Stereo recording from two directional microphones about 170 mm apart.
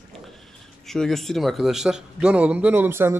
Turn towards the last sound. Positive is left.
turn(degrees=-15)  # may be behind; listen again after turning